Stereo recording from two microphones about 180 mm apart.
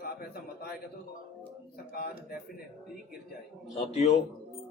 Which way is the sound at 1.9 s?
55° left (ahead or behind).